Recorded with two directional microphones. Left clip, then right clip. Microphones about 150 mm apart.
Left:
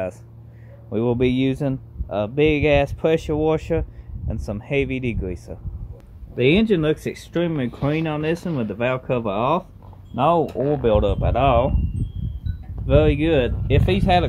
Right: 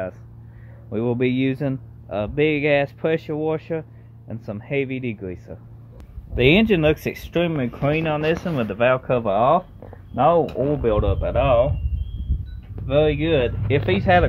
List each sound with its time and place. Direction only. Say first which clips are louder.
0.8 s speech: left 2 dB; 20° left (ahead or behind); by 3.8 s 35° left (ahead or behind)
4.3 s speech: left 2 dB; 25° left (ahead or behind)
6.3 s speech: right 1 dB; 5° right (ahead or behind)
7.8 s speech: right 3 dB; 15° left (ahead or behind)
10.8 s speech: left 2 dB; 35° left (ahead or behind)
12.8 s speech: left 1 dB; 50° left (ahead or behind)
13.7 s speech: right 4 dB; 15° left (ahead or behind)